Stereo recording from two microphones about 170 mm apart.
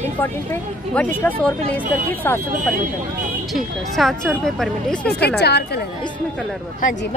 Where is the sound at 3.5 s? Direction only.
Centre (ahead or behind).